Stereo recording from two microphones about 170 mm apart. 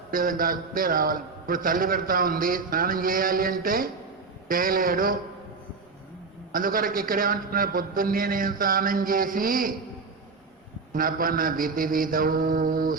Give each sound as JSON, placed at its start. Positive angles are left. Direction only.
{"t": 0.1, "sound": "a man's voice", "side_deg": -55}
{"t": 6.5, "sound": "a man's voice", "side_deg": -55}
{"t": 10.9, "sound": "a man's voice", "side_deg": -55}